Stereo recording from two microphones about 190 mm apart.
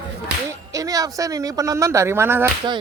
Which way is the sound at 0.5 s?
15° right (ahead or behind).